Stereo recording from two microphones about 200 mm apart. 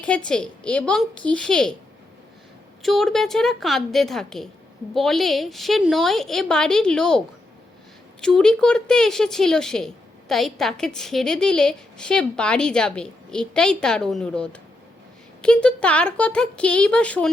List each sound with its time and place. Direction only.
0.3 s a woman's voice: 5° left (ahead or behind)
2.8 s a woman's voice: centre (ahead or behind)
8.2 s a woman's voice: 5° left (ahead or behind)